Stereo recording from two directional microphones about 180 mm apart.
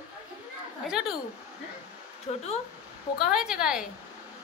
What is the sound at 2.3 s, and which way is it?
Speech, 35° left (ahead or behind).